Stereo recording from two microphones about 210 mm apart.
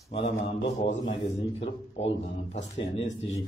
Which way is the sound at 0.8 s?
30° left (ahead or behind).